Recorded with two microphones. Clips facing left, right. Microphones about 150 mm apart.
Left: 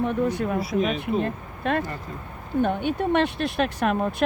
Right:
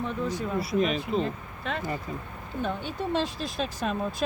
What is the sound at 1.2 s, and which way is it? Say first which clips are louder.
Speech: left 4 dB; 60° left (ahead or behind).